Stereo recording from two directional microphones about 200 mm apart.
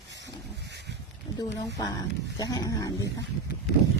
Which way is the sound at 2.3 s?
20° left (ahead or behind).